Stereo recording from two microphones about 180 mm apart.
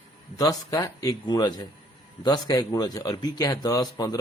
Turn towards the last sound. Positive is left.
turn(degrees=20)  # may be behind; listen again after turning